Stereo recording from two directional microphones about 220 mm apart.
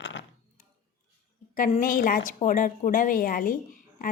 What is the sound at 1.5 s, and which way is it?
Speech, 40° left (ahead or behind).